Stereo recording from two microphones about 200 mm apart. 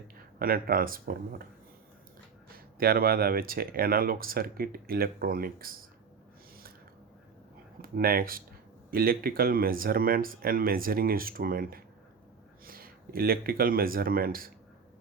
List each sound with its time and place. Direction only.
0.3 s speech: 45° right (ahead or behind)
2.7 s speech: 50° right (ahead or behind)
7.8 s speech: 45° right (ahead or behind)